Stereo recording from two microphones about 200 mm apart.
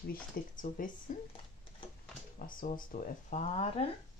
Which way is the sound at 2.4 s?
45° left (ahead or behind).